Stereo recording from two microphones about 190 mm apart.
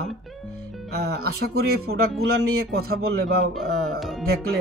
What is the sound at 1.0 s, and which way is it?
Speech, 55° right (ahead or behind).